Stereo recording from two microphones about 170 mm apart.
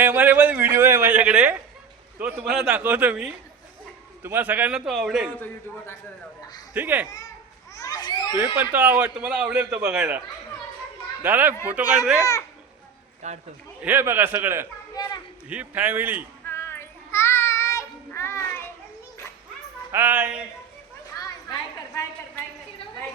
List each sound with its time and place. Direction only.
0.0 s a sound: 10° right (ahead or behind)
2.1 s a man's voice: 5° right (ahead or behind)
5.4 s a man's voice: 15° left (ahead or behind)
6.7 s a man's voice: 10° right (ahead or behind)
7.8 s children playing: 25° left (ahead or behind)
8.4 s a man's voice: 10° right (ahead or behind)
11.2 s a man's voice: 10° right (ahead or behind)
13.2 s a man's voice: 40° right (ahead or behind)
13.8 s a man's voice: 10° right (ahead or behind)
14.9 s a sound: 20° left (ahead or behind)
15.4 s a man's voice: 10° right (ahead or behind)
16.5 s child singing: 15° left (ahead or behind)
19.9 s a man's voice: 10° right (ahead or behind)
21.2 s a sound: 20° left (ahead or behind)